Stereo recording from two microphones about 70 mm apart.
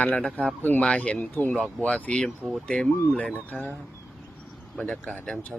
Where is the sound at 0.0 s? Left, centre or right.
Centre.